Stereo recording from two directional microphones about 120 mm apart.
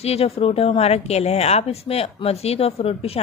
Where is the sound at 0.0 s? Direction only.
60° left (ahead or behind).